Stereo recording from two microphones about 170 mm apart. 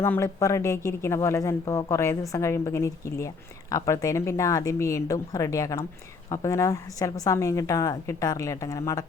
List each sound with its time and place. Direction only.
0.0 s speech: 15° left (ahead or behind)